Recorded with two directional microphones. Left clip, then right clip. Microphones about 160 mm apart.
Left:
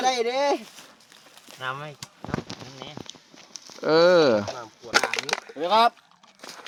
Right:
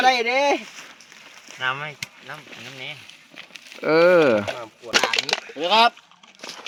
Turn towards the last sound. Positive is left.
turn(degrees=10)  # may be behind; listen again after turning